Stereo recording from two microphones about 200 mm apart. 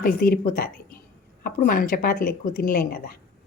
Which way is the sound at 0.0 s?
45° left (ahead or behind).